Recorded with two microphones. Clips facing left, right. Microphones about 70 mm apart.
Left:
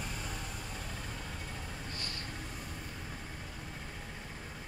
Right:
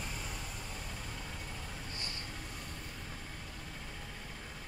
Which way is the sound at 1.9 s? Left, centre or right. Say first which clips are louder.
Left 2 dB; right.